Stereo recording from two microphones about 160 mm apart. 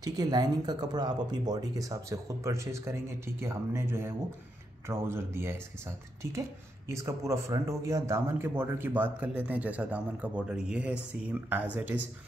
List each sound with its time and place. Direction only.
0.0 s a man's voice: 25° right (ahead or behind)
6.9 s a man's voice: 20° right (ahead or behind)